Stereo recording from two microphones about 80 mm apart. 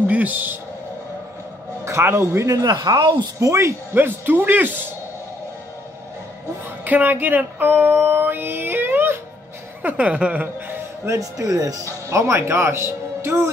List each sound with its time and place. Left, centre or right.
0.0 s a man's voice: centre
1.9 s speech: right
2.4 s speech: right
2.7 s speech: right
3.3 s speech: right
6.8 s a sound: right
9.8 s speech: centre
11.1 s speech: right